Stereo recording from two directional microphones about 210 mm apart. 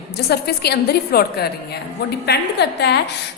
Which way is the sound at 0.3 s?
50° left (ahead or behind).